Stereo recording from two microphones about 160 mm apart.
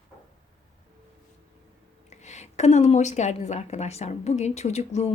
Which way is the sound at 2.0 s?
45° left (ahead or behind).